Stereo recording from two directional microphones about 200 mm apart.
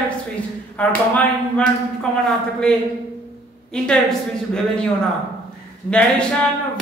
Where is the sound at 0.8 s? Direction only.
5° left (ahead or behind).